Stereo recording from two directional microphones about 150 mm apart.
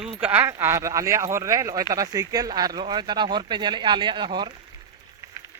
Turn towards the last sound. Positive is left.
turn(degrees=-30)  # may be behind; listen again after turning